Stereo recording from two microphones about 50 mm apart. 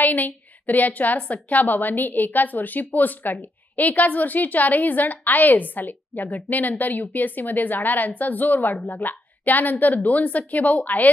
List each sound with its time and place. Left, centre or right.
0.0 s a woman's voice: left